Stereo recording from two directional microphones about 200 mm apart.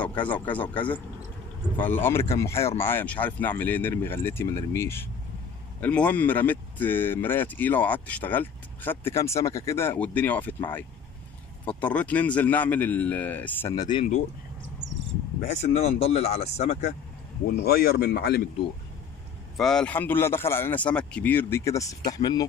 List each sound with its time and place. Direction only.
0.2 s speech: 10° left (ahead or behind)
11.6 s speech: 5° left (ahead or behind)
15.4 s speech: 35° left (ahead or behind)
17.5 s speech: 50° left (ahead or behind)
19.5 s speech: centre (ahead or behind); by 22.4 s 20° left (ahead or behind)